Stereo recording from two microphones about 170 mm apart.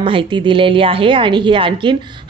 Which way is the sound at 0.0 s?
30° right (ahead or behind).